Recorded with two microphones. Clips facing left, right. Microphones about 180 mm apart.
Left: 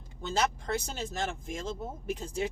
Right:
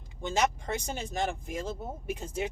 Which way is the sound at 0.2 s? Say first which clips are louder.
Right 2 dB; 10° right (ahead or behind).